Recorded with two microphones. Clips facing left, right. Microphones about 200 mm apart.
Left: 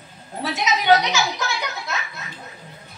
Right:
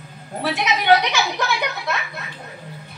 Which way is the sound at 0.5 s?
60° right (ahead or behind).